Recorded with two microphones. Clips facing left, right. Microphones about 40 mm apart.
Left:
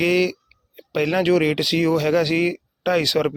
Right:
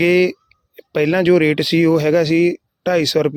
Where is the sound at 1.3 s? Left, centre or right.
Centre.